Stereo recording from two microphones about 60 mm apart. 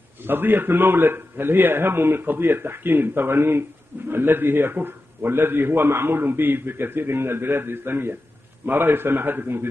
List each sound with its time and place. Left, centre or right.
0.2 s a man's voice: right